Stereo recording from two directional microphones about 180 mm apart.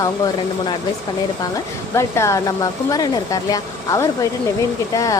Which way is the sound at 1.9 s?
15° left (ahead or behind).